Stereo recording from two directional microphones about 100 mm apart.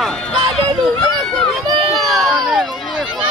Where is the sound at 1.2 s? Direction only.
5° left (ahead or behind).